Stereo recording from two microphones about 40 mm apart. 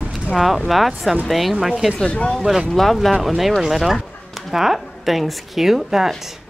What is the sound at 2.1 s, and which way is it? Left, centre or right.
Speech, left.